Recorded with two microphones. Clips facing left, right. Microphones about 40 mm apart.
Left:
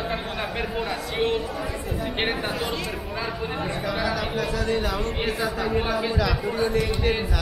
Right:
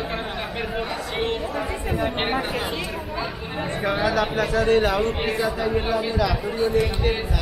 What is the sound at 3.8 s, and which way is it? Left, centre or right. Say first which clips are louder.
Speech: right 6 dB; right.